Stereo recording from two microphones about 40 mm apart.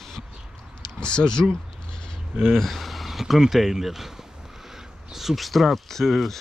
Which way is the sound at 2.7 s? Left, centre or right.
Centre.